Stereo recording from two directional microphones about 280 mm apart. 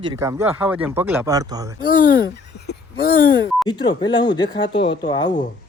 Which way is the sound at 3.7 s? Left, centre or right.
Centre.